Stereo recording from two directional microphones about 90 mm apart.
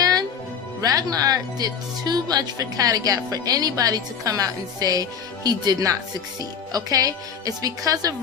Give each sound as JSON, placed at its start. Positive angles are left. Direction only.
{"t": 0.0, "sound": "music", "side_deg": -45}
{"t": 0.8, "sound": "speech", "side_deg": -40}